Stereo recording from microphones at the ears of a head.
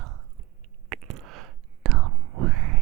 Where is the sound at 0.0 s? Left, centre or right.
Right.